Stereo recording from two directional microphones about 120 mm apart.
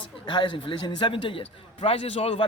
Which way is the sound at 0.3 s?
40° left (ahead or behind).